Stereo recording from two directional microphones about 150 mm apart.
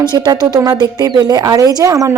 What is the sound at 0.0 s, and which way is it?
Speech, 30° right (ahead or behind).